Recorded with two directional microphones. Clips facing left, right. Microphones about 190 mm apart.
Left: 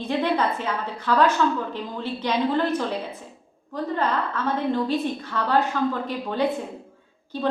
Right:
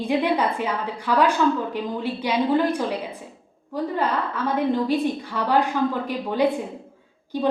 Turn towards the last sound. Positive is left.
turn(degrees=-15)  # may be behind; listen again after turning